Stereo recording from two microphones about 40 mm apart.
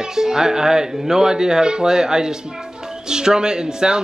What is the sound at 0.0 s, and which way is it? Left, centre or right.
Speech, centre.